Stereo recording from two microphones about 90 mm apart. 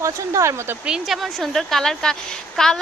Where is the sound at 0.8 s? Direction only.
5° right (ahead or behind).